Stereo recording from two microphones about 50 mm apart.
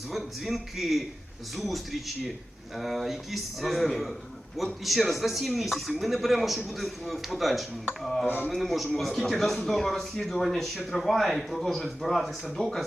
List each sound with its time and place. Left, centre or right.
0.1 s a man's voice: centre
12.6 s speech: left